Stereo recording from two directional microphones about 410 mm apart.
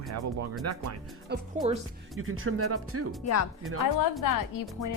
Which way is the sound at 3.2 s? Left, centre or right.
Left.